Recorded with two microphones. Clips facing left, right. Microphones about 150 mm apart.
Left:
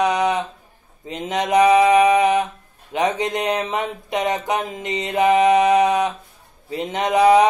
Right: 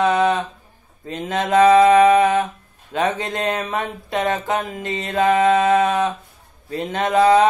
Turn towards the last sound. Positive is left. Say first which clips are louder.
# even
turn(degrees=20)  # may be behind; listen again after turning